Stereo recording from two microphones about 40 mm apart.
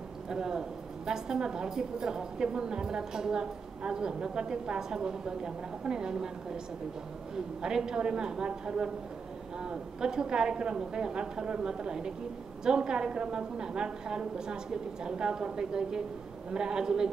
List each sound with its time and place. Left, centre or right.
0.3 s a woman's voice: centre